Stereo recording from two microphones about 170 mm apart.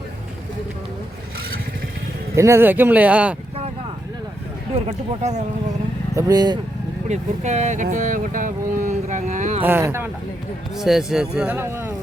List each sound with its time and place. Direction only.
2.3 s speech: 15° right (ahead or behind)
4.9 s speech: 40° right (ahead or behind)
6.1 s speech: 20° right (ahead or behind)
7.1 s speech: 45° right (ahead or behind)
9.6 s speech: 10° right (ahead or behind)
10.8 s speech: centre (ahead or behind)